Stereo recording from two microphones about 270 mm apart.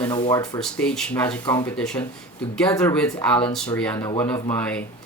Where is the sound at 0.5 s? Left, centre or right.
Centre.